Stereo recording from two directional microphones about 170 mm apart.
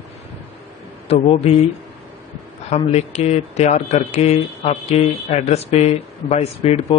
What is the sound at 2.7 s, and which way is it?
Speech, 40° left (ahead or behind).